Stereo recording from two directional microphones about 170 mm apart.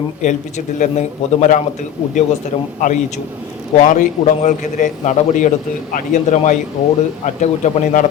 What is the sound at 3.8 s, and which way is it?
A man's voice, 45° left (ahead or behind).